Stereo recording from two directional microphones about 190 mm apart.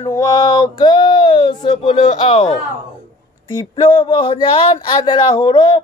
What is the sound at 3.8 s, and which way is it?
Male singing, 25° left (ahead or behind).